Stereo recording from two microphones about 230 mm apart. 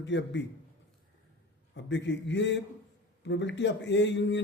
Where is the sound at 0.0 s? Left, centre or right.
Left.